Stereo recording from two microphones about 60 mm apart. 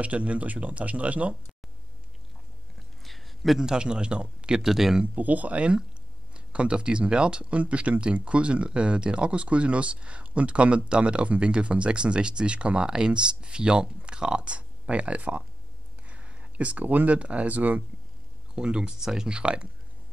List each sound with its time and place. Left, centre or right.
0.0 s speech: right
3.0 s a man's voice: centre
5.1 s speech: right
18.5 s speech: centre